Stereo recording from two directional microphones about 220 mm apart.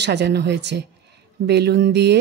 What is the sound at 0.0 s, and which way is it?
A woman's voice, 50° right (ahead or behind).